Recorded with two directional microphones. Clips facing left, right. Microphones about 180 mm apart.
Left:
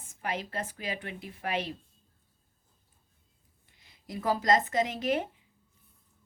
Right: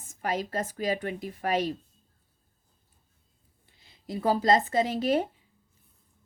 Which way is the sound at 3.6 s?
30° right (ahead or behind).